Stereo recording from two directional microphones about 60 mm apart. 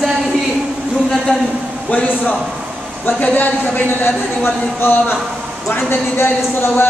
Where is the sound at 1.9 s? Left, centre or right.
Left.